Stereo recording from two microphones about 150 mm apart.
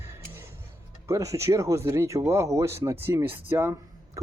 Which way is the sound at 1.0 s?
20° right (ahead or behind).